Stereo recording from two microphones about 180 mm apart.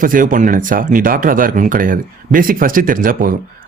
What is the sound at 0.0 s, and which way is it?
Speech, 50° right (ahead or behind).